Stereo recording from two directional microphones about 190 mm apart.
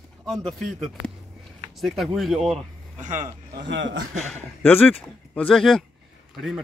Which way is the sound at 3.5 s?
70° right (ahead or behind).